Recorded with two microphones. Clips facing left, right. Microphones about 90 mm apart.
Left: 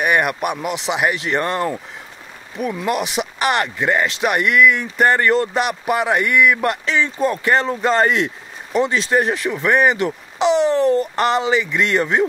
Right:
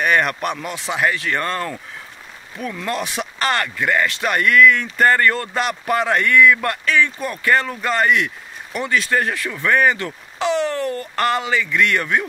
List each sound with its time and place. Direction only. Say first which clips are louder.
0.0 s speech: left 1 dB; 15° left (ahead or behind)